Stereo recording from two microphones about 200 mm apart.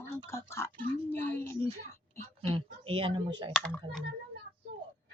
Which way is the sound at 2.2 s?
10° left (ahead or behind).